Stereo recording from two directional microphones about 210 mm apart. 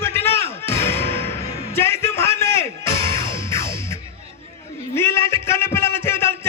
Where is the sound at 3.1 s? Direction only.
15° left (ahead or behind).